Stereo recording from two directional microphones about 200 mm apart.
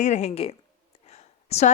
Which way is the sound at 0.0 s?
35° left (ahead or behind).